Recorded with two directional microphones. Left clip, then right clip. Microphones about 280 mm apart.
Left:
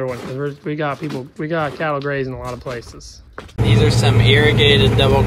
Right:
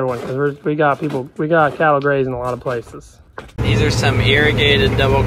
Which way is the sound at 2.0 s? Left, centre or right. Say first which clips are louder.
Right 6 dB; right.